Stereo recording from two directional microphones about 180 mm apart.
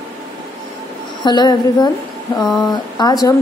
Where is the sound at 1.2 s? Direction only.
25° left (ahead or behind).